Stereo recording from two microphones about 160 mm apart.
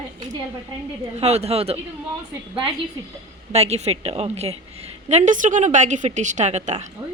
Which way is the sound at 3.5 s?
40° right (ahead or behind).